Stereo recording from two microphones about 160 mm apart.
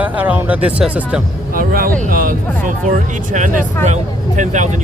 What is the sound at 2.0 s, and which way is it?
Speech, 60° right (ahead or behind).